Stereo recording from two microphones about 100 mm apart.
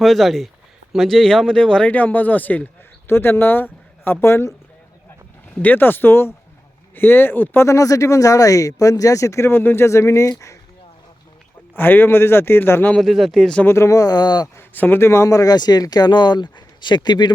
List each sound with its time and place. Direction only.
0.0 s speech: centre (ahead or behind); by 4.5 s 25° left (ahead or behind)
5.5 s speech: 15° left (ahead or behind); by 10.6 s 30° left (ahead or behind)
11.8 s speech: 20° left (ahead or behind)
12.9 s speech: centre (ahead or behind)
13.7 s speech: 30° left (ahead or behind)
14.5 s speech: 20° left (ahead or behind); by 17.3 s 45° left (ahead or behind)